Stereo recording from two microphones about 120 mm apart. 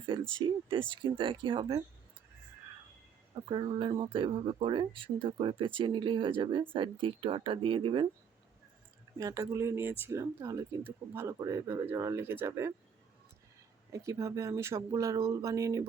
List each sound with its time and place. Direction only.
0.3 s speech: 45° right (ahead or behind)
3.5 s speech: 45° right (ahead or behind)
9.1 s speech: 30° right (ahead or behind)
13.9 s speech: 25° right (ahead or behind)